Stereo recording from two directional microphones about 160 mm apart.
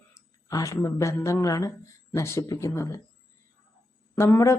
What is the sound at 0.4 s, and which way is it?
Speech, 20° left (ahead or behind).